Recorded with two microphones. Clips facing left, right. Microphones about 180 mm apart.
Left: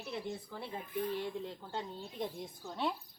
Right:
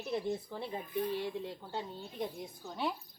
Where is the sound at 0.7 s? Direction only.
15° right (ahead or behind).